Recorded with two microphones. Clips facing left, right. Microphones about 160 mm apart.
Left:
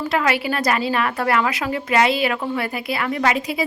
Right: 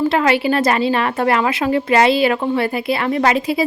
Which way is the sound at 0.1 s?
30° right (ahead or behind).